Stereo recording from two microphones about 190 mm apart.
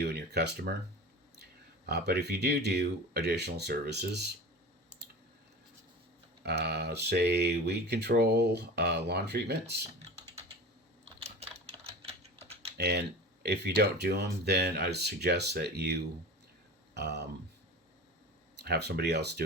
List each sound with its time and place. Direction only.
0.0 s speech: 60° right (ahead or behind)
1.9 s speech: 60° right (ahead or behind)
6.4 s speech: 60° right (ahead or behind)
11.9 s typing: 30° right (ahead or behind)
12.7 s speech: 60° right (ahead or behind)
18.6 s speech: 60° right (ahead or behind)